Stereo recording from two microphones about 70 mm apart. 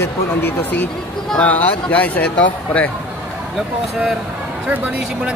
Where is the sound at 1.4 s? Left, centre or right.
Left.